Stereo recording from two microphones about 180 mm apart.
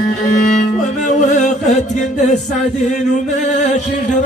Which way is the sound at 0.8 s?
40° left (ahead or behind).